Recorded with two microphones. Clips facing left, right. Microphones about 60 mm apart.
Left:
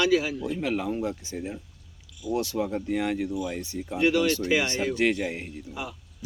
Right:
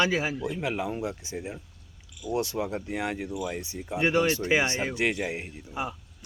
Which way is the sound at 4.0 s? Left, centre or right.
Right.